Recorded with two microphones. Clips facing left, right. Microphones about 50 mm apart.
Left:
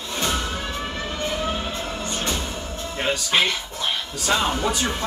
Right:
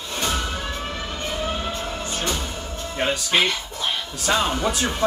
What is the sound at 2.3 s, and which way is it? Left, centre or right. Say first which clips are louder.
Music: left 1 dB; left.